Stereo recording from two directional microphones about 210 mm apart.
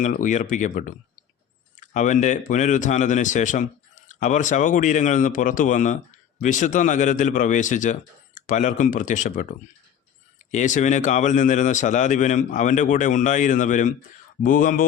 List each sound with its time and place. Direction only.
0.0 s speech: 40° left (ahead or behind)
10.5 s speech: 35° left (ahead or behind)